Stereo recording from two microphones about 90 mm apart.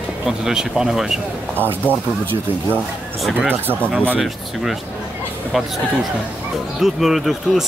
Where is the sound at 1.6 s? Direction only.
25° right (ahead or behind).